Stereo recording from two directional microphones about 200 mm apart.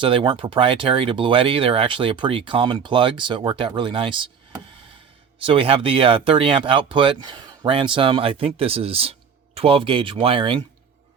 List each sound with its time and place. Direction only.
0.0 s speech: 25° right (ahead or behind)
5.5 s speech: 25° right (ahead or behind)